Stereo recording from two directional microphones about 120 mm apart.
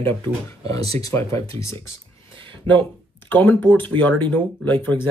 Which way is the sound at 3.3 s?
15° left (ahead or behind).